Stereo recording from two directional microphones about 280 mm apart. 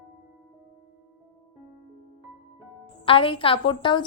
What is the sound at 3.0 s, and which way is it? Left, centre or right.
A woman's voice, centre.